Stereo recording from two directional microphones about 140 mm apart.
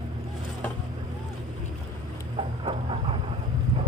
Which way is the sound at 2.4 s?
40° right (ahead or behind).